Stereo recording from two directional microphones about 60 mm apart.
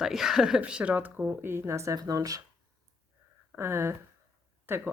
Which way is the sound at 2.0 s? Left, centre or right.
Right.